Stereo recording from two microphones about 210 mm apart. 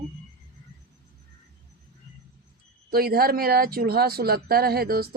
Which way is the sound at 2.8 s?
45° right (ahead or behind).